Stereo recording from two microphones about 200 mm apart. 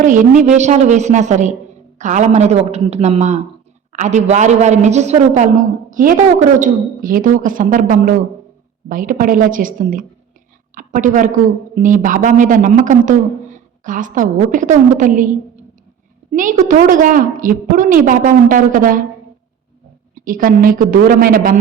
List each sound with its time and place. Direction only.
0.0 s a man's voice: 40° right (ahead or behind)
16.3 s a woman's voice: 40° right (ahead or behind)
20.1 s a woman's voice: 45° right (ahead or behind)